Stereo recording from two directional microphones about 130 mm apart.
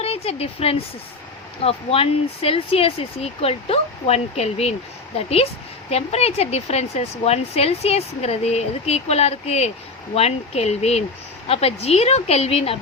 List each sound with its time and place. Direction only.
0.0 s speech: 50° left (ahead or behind)